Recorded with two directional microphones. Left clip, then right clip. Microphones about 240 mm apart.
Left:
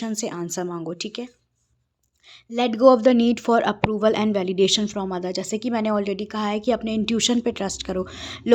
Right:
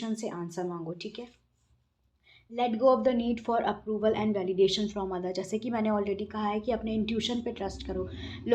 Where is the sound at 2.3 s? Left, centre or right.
Left.